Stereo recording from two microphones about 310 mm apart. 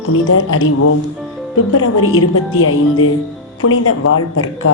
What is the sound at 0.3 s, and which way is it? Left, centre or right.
A woman's voice, left.